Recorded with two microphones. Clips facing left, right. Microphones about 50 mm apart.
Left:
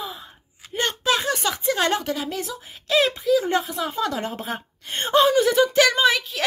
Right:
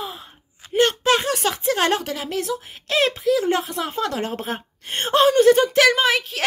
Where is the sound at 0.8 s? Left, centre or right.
Right.